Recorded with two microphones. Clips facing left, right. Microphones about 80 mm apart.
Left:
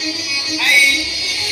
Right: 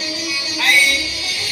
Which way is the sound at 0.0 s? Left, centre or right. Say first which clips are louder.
Even; right.